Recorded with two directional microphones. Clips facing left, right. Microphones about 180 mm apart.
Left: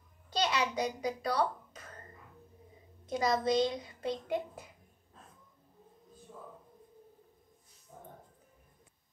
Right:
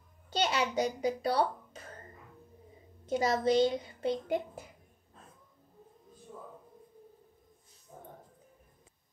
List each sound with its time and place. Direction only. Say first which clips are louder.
0.4 s a child's voice: right 2 dB; 25° right (ahead or behind)
3.1 s speech: right 2 dB; 30° right (ahead or behind)